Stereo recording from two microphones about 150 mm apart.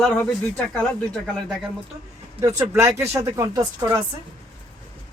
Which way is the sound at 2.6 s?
20° right (ahead or behind).